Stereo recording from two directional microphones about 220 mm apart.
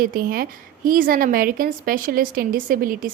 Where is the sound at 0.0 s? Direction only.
40° right (ahead or behind).